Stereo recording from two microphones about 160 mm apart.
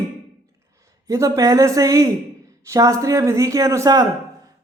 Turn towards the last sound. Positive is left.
turn(degrees=-25)  # may be behind; listen again after turning